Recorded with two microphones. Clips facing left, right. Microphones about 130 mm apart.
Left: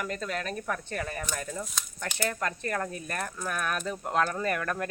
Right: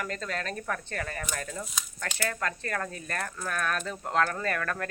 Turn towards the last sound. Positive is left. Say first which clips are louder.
# left 1 dB
turn(degrees=15)  # may be behind; listen again after turning